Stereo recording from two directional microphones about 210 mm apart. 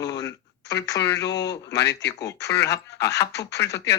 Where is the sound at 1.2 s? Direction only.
55° left (ahead or behind).